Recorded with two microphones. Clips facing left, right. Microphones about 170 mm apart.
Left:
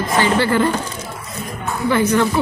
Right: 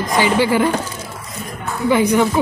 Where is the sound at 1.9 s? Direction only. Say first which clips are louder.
Right 2 dB; 15° right (ahead or behind).